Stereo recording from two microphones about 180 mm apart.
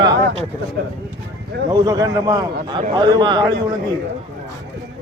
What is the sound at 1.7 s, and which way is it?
A man's voice, 20° right (ahead or behind).